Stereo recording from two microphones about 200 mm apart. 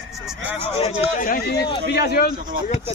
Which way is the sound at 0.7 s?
30° left (ahead or behind).